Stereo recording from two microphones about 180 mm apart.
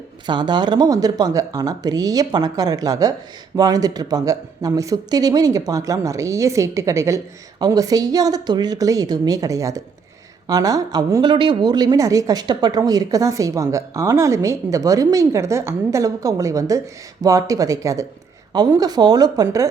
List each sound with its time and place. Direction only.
0.3 s a woman's voice: 25° right (ahead or behind)